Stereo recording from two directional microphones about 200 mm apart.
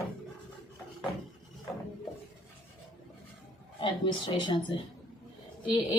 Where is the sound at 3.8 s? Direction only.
25° left (ahead or behind).